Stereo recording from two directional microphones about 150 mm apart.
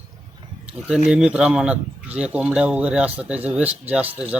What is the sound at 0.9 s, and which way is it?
Speech, 5° right (ahead or behind).